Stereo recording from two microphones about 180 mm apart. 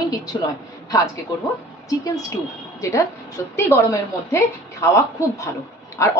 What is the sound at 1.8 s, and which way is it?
A woman's voice, 20° left (ahead or behind).